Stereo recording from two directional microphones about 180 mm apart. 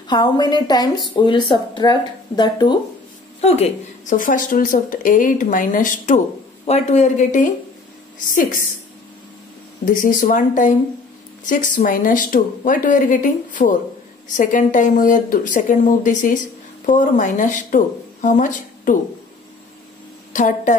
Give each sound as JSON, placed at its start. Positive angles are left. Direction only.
{"t": 0.1, "sound": "a woman's voice", "side_deg": 25}
{"t": 3.3, "sound": "speech", "side_deg": 35}
{"t": 9.8, "sound": "speech", "side_deg": 45}
{"t": 20.3, "sound": "speech", "side_deg": 45}